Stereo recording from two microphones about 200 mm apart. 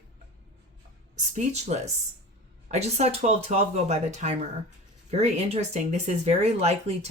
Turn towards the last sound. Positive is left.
turn(degrees=-30)  # may be behind; listen again after turning